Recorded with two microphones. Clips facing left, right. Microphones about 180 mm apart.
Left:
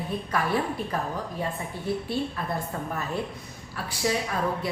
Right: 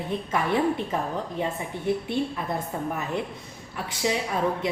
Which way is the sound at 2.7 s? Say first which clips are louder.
Right 2 dB; 15° right (ahead or behind).